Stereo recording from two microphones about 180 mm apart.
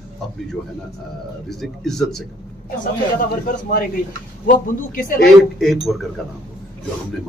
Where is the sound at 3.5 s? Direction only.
50° left (ahead or behind).